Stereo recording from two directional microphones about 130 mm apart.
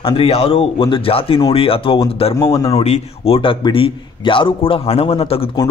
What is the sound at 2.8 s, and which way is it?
Speech, 50° left (ahead or behind).